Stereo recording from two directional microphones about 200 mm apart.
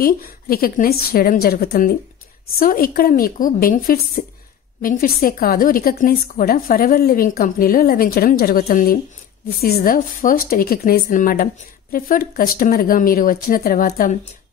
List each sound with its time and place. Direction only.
0.0 s a woman's voice: 50° left (ahead or behind)